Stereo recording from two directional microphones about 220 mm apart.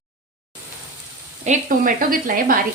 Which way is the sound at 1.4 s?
40° right (ahead or behind).